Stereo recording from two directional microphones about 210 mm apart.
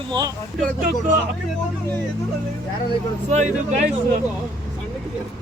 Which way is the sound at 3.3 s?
35° right (ahead or behind).